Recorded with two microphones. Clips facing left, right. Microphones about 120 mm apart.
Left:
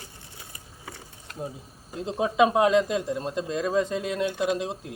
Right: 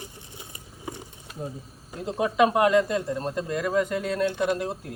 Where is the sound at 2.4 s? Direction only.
20° left (ahead or behind).